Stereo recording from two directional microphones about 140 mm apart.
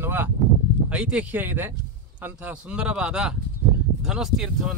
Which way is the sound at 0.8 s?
10° right (ahead or behind).